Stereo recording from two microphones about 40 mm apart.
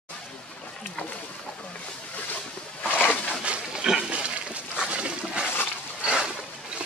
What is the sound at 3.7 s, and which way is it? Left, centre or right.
Pig, centre.